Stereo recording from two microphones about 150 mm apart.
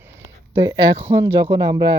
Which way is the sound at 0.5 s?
30° right (ahead or behind).